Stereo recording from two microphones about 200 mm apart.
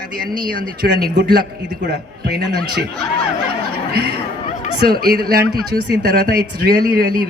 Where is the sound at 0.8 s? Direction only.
50° right (ahead or behind).